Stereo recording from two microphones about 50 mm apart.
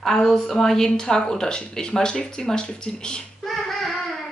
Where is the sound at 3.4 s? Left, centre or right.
Centre.